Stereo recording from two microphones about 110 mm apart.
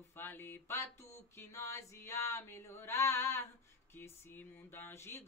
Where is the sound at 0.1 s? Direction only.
20° left (ahead or behind).